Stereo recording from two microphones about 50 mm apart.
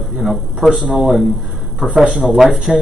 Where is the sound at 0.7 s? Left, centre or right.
Centre.